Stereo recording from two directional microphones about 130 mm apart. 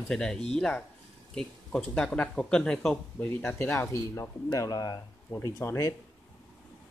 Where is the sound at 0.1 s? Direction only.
5° left (ahead or behind); by 5.9 s 20° left (ahead or behind).